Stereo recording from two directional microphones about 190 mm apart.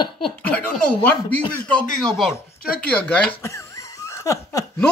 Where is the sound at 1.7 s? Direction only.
5° left (ahead or behind).